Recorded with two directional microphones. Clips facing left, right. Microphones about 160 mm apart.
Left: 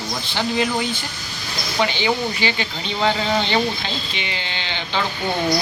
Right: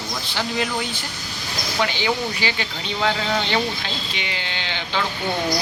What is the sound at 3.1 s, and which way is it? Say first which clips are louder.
Speech: left 3 dB; 10° left (ahead or behind).